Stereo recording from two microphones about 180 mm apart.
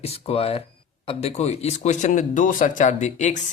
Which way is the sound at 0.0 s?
35° left (ahead or behind).